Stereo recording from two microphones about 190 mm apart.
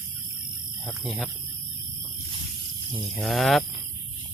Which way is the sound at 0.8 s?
Centre (ahead or behind).